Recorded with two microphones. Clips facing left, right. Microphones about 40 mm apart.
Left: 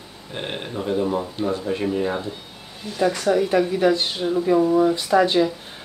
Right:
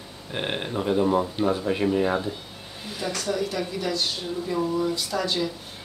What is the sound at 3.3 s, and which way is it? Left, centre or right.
Speech, left.